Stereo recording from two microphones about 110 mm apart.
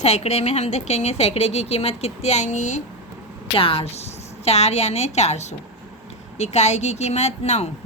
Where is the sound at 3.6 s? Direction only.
55° left (ahead or behind).